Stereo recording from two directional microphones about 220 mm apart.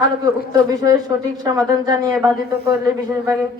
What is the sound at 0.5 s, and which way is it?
Brass instrument, 15° right (ahead or behind).